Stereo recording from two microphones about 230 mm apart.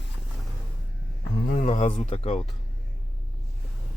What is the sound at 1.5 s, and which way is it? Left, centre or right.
Speech, left.